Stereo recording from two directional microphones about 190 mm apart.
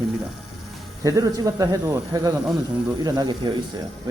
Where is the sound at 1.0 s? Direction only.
15° right (ahead or behind).